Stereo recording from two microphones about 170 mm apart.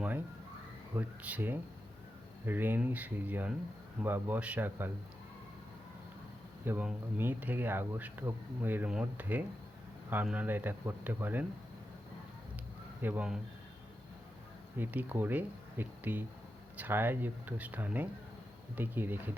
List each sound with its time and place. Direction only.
0.9 s speech: 10° right (ahead or behind)
6.7 s speech: 10° right (ahead or behind)
13.0 s speech: 10° right (ahead or behind)
14.8 s speech: 10° right (ahead or behind)